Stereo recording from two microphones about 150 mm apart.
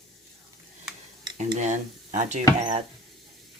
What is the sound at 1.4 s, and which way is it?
Speech, 55° right (ahead or behind).